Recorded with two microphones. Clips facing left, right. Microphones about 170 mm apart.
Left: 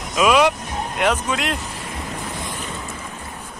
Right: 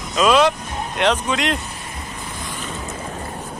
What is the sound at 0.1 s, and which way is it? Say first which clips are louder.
Speech: right 1 dB; 10° left (ahead or behind).